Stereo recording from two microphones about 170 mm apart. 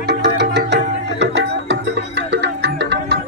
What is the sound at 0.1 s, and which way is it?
Music, 85° right.